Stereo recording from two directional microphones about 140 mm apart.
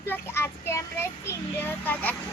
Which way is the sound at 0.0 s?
15° left (ahead or behind).